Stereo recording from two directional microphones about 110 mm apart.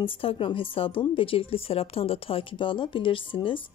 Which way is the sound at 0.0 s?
55° left (ahead or behind).